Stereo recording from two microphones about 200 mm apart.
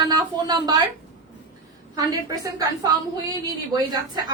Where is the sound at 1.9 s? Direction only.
20° right (ahead or behind).